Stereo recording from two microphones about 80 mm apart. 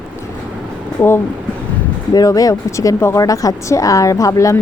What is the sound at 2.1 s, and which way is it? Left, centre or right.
A woman's voice, left.